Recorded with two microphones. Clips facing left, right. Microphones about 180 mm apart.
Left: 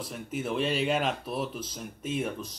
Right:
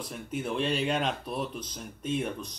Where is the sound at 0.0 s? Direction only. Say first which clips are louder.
Even; centre (ahead or behind).